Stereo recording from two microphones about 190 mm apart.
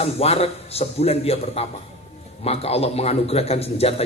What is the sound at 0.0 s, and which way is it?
A man's voice, 30° left (ahead or behind).